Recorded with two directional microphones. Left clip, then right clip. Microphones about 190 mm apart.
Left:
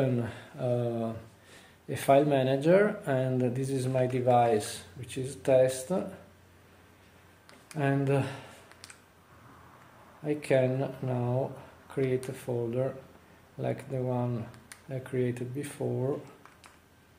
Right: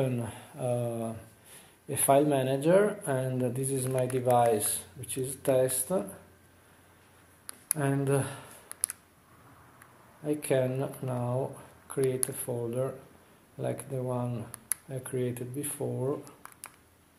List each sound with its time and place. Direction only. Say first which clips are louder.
0.0 s speech: left 2 dB; 5° left (ahead or behind)
7.7 s speech: left 1 dB; centre (ahead or behind)
8.8 s a sound: right 10 dB; 55° right (ahead or behind)
10.2 s speech: left 2 dB; centre (ahead or behind)
11.9 s a sound: right 1 dB; centre (ahead or behind)
12.4 s speech: left 1 dB; centre (ahead or behind)